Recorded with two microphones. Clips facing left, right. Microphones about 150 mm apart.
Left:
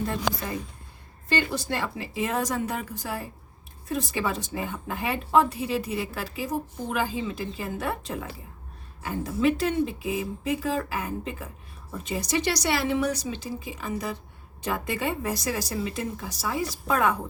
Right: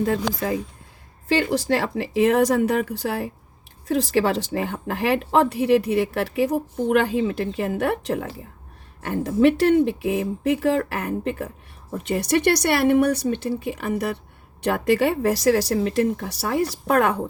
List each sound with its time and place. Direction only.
1.3 s speech: 85° right; by 17.2 s 70° right (ahead or behind)